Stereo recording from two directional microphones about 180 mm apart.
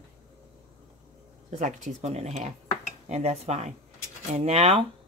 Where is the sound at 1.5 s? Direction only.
40° right (ahead or behind).